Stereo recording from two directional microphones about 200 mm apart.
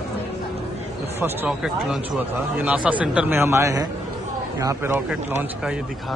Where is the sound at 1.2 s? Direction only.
5° right (ahead or behind).